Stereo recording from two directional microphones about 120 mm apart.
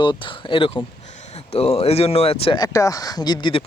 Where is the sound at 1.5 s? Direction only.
60° left (ahead or behind).